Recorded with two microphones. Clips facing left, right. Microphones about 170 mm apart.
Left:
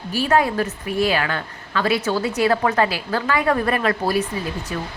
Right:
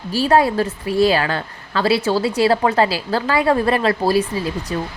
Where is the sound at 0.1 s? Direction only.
35° right (ahead or behind).